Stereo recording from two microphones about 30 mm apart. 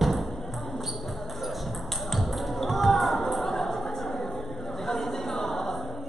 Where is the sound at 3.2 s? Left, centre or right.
Centre.